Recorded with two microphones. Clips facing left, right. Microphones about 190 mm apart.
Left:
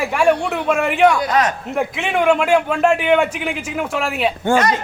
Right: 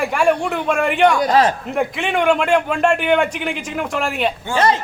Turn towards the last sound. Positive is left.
turn(degrees=-30)  # may be behind; listen again after turning